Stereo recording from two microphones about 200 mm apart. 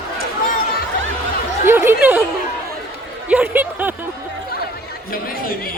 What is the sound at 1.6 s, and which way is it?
Chatter, 10° right (ahead or behind).